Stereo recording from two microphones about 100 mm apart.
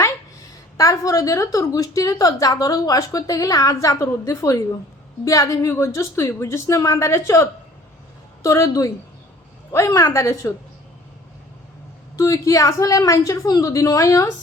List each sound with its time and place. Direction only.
0.8 s a woman's voice: 35° left (ahead or behind)
8.4 s a woman's voice: 30° left (ahead or behind)
12.1 s a woman's voice: 35° left (ahead or behind)